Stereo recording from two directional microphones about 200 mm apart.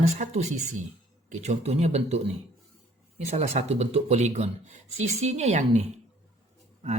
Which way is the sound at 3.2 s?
35° right (ahead or behind).